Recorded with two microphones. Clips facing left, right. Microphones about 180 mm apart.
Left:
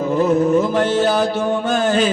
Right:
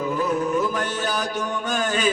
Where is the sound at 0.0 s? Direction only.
40° left (ahead or behind).